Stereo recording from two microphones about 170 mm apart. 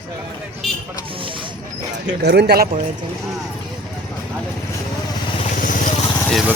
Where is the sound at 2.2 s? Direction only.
75° right (ahead or behind).